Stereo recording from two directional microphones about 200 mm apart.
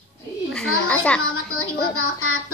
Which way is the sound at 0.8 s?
5° left (ahead or behind).